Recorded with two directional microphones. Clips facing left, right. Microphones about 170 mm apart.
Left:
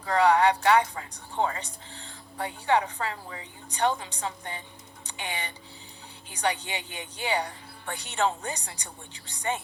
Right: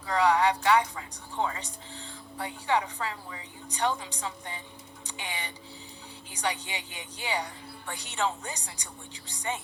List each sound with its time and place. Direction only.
0.0 s speech: 55° left (ahead or behind)